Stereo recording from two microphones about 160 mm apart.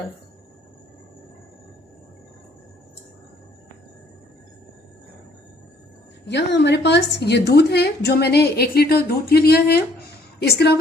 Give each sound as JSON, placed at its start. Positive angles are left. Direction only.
{"t": 6.2, "sound": "a woman's voice", "side_deg": 90}
{"t": 10.4, "sound": "a woman's voice", "side_deg": 90}